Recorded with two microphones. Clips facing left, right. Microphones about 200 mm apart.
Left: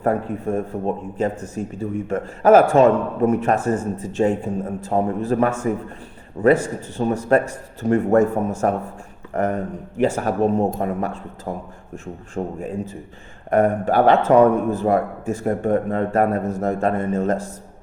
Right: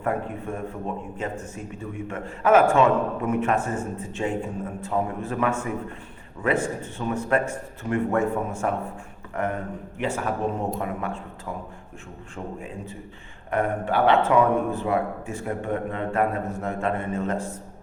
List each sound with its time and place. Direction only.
0.0 s speech: 40° left (ahead or behind)
6.9 s speech: 40° left (ahead or behind)
9.3 s a sound: 40° left (ahead or behind)
10.2 s a man's voice: 40° left (ahead or behind)